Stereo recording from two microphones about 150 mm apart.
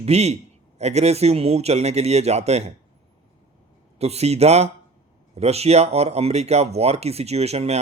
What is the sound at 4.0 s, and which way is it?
Speech, 45° right (ahead or behind).